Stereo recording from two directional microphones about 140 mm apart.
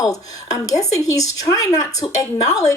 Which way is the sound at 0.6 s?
25° left (ahead or behind).